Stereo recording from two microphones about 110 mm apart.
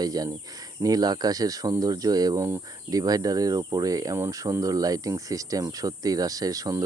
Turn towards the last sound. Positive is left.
turn(degrees=-35)  # may be behind; listen again after turning